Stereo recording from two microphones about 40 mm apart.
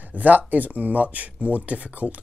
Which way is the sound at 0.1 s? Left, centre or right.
Right.